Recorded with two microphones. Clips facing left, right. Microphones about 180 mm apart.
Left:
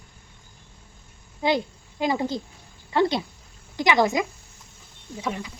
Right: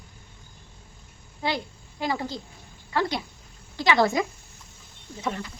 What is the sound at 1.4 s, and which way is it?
Speech, 20° left (ahead or behind).